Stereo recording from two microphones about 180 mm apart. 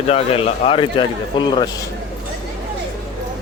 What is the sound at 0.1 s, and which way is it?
A man's voice, 35° left (ahead or behind).